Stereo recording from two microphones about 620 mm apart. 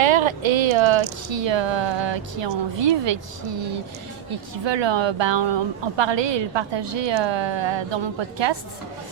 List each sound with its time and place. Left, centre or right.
0.0 s speech: right
4.6 s speech: right